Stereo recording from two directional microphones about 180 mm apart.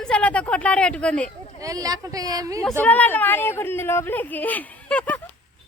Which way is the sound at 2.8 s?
10° left (ahead or behind).